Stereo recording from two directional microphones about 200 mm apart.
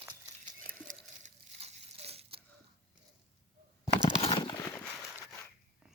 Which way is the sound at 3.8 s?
30° left (ahead or behind).